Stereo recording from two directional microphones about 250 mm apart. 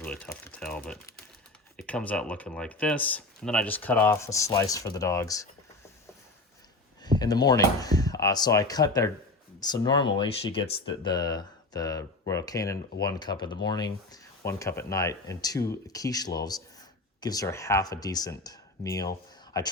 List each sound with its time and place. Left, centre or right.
0.0 s speech: centre
7.0 s speech: centre